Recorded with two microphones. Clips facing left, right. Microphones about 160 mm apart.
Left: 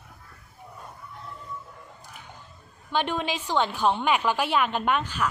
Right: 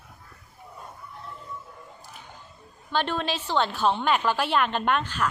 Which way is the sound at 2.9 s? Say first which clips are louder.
Even; 15° left (ahead or behind).